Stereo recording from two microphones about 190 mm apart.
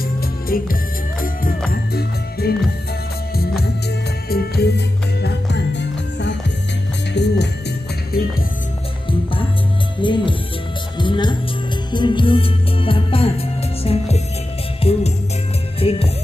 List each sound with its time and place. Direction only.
0.0 s music: 50° left (ahead or behind)
8.1 s music: 50° left (ahead or behind)
9.9 s music: 25° left (ahead or behind)